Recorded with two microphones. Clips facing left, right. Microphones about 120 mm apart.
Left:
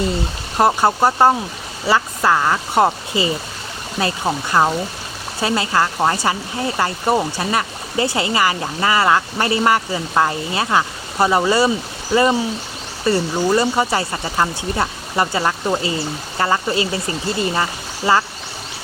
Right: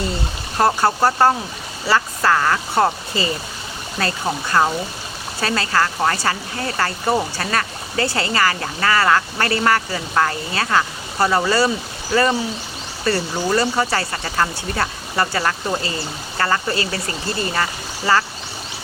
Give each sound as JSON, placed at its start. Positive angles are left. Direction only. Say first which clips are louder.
{"t": 0.5, "sound": "speech", "louder": "left 2 dB", "side_deg": 20}